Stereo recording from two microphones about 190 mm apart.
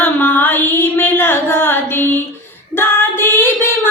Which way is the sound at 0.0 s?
10° left (ahead or behind).